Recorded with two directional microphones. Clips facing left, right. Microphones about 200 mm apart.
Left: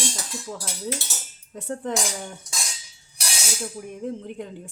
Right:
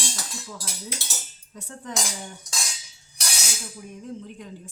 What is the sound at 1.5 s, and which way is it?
Speech, 55° left (ahead or behind).